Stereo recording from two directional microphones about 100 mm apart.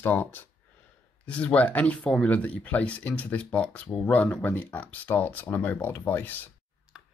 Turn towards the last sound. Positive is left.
turn(degrees=-10)  # may be behind; listen again after turning